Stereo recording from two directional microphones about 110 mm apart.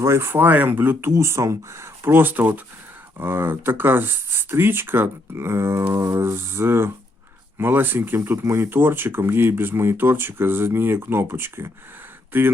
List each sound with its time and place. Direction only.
0.0 s speech: 25° right (ahead or behind)